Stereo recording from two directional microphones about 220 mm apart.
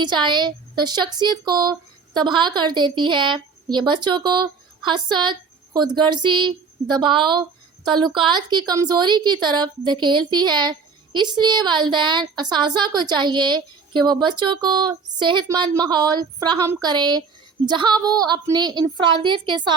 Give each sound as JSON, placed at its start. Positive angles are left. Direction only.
{"t": 0.0, "sound": "a woman's voice", "side_deg": -20}